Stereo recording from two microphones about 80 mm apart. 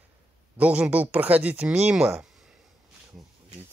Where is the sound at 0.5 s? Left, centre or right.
Centre.